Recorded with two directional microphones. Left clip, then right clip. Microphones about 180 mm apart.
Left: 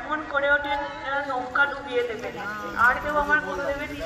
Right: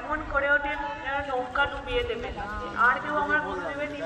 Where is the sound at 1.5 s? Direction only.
50° right (ahead or behind).